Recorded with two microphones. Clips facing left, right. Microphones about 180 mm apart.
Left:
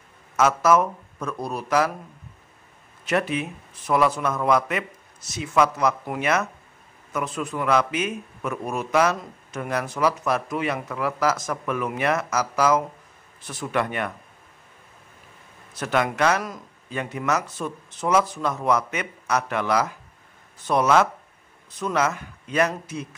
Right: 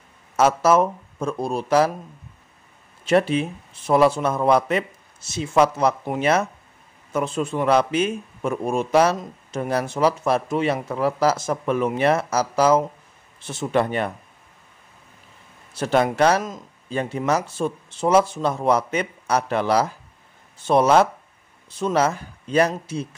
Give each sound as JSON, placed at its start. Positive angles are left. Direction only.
{"t": 0.4, "sound": "speech", "side_deg": -30}
{"t": 3.1, "sound": "speech", "side_deg": -30}
{"t": 15.7, "sound": "speech", "side_deg": -30}